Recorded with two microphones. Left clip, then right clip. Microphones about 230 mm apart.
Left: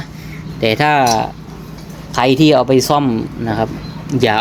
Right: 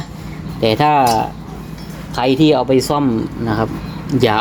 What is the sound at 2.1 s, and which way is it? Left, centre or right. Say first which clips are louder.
Speech: left 2 dB; left.